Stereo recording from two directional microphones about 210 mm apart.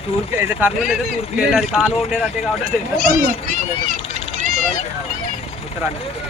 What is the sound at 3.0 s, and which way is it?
Speech, 40° right (ahead or behind).